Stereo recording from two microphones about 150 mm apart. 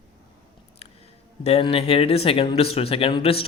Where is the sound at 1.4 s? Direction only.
40° left (ahead or behind).